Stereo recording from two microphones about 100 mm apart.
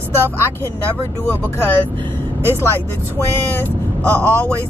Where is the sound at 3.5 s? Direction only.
20° left (ahead or behind).